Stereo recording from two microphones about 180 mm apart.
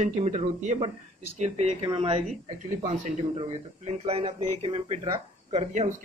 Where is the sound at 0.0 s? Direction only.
35° right (ahead or behind).